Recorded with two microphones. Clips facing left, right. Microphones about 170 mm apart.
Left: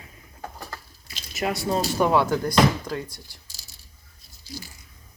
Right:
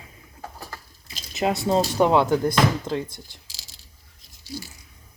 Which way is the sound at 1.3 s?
25° right (ahead or behind).